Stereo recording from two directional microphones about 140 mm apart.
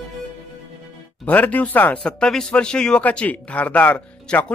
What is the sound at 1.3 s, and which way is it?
Speech, 10° left (ahead or behind).